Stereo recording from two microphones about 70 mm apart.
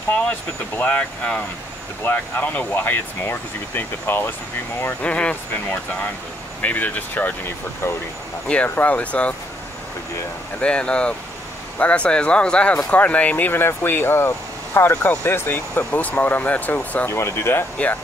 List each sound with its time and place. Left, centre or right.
0.1 s speech: left
8.6 s speech: left
10.6 s speech: centre
17.1 s speech: left